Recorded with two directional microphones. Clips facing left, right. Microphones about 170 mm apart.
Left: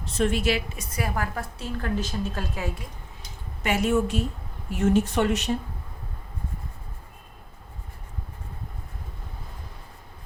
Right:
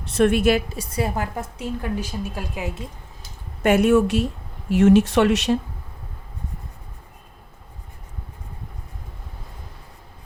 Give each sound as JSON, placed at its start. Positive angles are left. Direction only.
{"t": 0.0, "sound": "a woman's voice", "side_deg": -65}
{"t": 0.7, "sound": "a woman's voice", "side_deg": -30}
{"t": 3.6, "sound": "a woman's voice", "side_deg": -55}
{"t": 4.7, "sound": "speech", "side_deg": -85}